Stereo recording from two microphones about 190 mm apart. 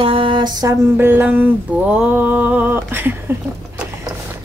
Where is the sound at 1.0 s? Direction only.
10° right (ahead or behind).